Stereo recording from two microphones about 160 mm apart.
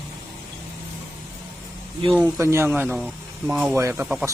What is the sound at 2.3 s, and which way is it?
Speech, 15° right (ahead or behind).